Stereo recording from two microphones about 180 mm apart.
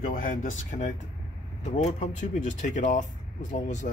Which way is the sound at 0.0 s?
50° left (ahead or behind).